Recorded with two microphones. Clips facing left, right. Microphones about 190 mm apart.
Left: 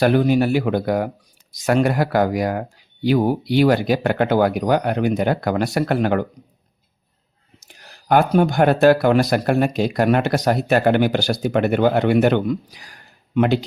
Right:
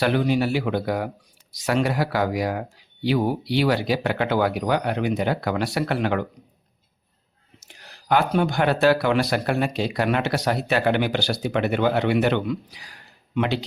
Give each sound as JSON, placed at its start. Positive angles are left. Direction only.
{"t": 0.0, "sound": "speech", "side_deg": 45}
{"t": 7.9, "sound": "speech", "side_deg": 50}